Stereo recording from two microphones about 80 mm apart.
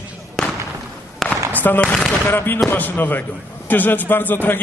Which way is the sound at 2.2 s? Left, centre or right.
Left.